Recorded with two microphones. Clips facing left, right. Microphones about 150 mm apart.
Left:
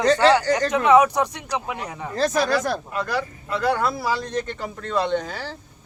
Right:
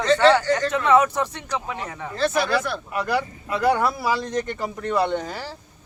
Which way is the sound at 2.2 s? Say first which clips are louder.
Left 1 dB; 40° left (ahead or behind).